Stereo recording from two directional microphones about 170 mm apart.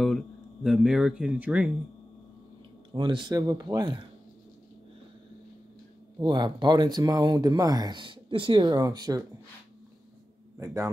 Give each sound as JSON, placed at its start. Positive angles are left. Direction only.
{"t": 0.7, "sound": "speech", "side_deg": -5}
{"t": 2.9, "sound": "speech", "side_deg": -25}
{"t": 6.1, "sound": "speech", "side_deg": -25}
{"t": 10.6, "sound": "speech", "side_deg": -20}